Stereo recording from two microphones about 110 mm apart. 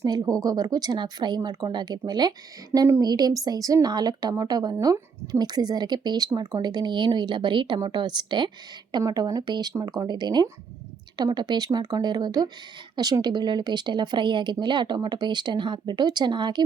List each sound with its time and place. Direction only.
0.0 s a woman's voice: 35° right (ahead or behind)
2.7 s a woman's voice: 25° right (ahead or behind)
3.0 s a woman's voice: 40° right (ahead or behind)